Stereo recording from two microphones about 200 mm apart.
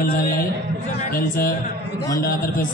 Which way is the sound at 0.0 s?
45° left (ahead or behind).